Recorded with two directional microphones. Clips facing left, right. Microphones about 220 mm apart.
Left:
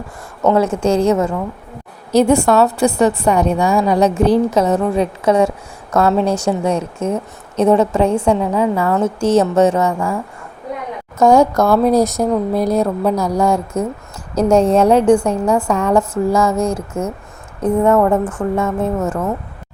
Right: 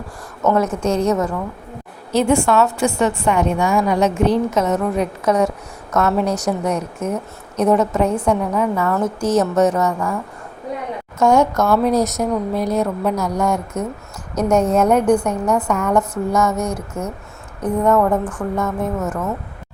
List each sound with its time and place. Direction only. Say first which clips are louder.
0.4 s a woman's voice: left 3 dB; 30° left (ahead or behind)
2.1 s a woman's voice: left 4 dB; 40° left (ahead or behind)
11.2 s a woman's voice: left 4 dB; 35° left (ahead or behind)
18.3 s a woman's voice: left 4 dB; 25° left (ahead or behind)